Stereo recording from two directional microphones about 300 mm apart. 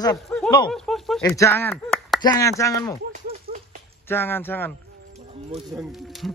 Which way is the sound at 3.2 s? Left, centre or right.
Right.